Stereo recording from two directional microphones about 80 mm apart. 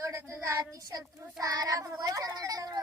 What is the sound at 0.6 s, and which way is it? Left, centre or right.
Speech, right.